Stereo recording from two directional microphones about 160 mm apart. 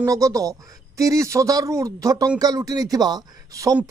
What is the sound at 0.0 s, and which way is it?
Speech, 20° right (ahead or behind).